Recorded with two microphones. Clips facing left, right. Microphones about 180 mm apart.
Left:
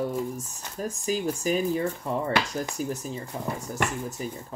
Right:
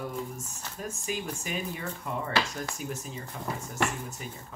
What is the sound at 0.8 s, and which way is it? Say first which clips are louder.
Speech: left 7 dB; 35° left (ahead or behind).